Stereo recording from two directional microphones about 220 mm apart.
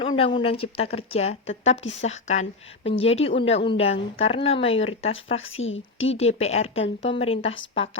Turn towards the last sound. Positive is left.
turn(degrees=25)  # may be behind; listen again after turning